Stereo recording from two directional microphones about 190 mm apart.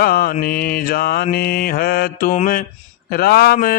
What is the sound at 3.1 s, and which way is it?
Mantra, 55° left (ahead or behind).